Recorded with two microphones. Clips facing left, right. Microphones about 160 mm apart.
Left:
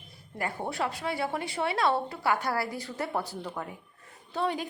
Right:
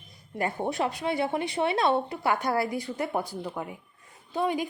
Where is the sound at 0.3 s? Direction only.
20° right (ahead or behind).